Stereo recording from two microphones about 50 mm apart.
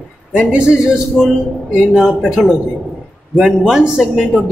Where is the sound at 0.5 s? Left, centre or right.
Centre.